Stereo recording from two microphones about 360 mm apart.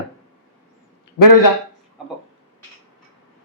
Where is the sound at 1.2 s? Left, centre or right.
Left.